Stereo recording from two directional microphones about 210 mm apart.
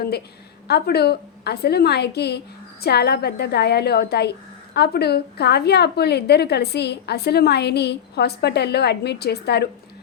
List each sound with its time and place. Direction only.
0.7 s a woman's voice: 50° left (ahead or behind)